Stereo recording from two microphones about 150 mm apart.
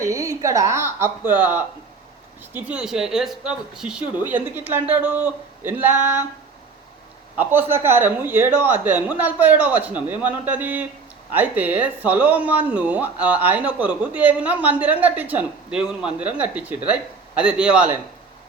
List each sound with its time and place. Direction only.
0.0 s speech: 20° right (ahead or behind)
7.3 s speech: 15° right (ahead or behind)